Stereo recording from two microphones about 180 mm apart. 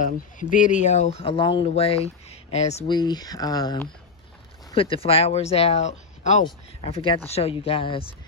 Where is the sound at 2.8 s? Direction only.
25° left (ahead or behind).